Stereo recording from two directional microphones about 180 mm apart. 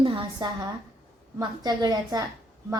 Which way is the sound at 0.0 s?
25° right (ahead or behind).